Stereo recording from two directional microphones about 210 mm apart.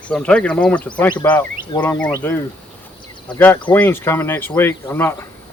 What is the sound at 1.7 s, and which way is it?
Speech, 20° left (ahead or behind).